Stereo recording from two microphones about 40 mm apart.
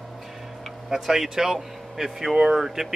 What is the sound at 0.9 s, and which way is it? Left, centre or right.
Speech, centre.